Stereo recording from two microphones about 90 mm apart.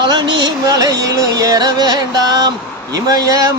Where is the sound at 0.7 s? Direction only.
40° right (ahead or behind).